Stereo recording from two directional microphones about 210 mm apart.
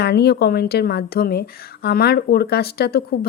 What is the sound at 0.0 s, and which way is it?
Speech, 50° left (ahead or behind).